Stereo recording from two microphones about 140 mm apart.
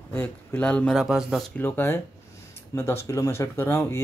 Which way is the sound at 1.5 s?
15° left (ahead or behind).